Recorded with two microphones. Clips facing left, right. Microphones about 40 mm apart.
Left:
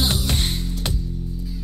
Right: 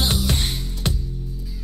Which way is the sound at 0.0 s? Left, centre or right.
Centre.